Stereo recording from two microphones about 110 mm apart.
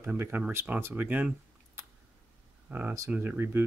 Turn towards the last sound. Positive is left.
turn(degrees=-20)  # may be behind; listen again after turning